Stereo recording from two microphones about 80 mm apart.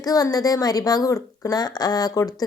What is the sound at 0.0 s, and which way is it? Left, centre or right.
A woman's voice, left.